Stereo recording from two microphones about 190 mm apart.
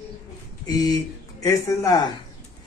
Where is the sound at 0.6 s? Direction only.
20° left (ahead or behind).